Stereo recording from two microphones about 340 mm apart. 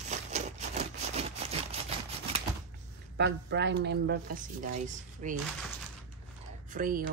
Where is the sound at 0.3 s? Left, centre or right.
Centre.